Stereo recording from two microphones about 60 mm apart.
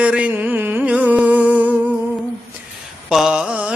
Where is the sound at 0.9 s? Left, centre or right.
Right.